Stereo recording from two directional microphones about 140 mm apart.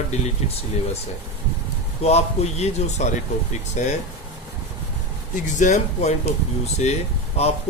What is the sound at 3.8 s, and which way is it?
Speech, 60° left (ahead or behind).